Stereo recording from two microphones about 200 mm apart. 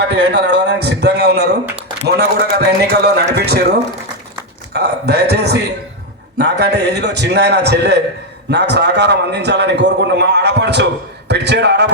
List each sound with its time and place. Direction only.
0.0 s a man's voice: 60° right (ahead or behind)